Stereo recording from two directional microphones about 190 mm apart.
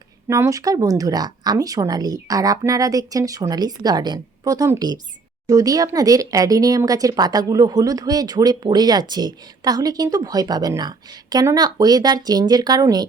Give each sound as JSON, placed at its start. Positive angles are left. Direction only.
{"t": 0.3, "sound": "speech", "side_deg": -15}